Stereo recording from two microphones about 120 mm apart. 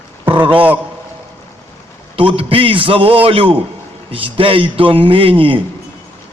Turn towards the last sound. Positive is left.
turn(degrees=-45)  # may be behind; listen again after turning